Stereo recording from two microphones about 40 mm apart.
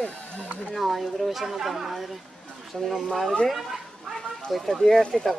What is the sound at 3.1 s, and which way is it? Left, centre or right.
Speech, centre.